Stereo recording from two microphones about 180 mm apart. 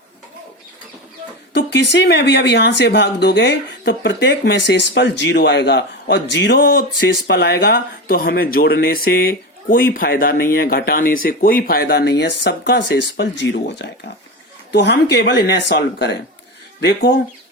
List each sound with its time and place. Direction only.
1.5 s speech: 75° left (ahead or behind)
7.3 s speech: 60° left (ahead or behind)